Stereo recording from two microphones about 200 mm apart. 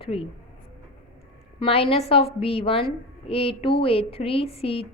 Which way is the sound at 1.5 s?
30° left (ahead or behind).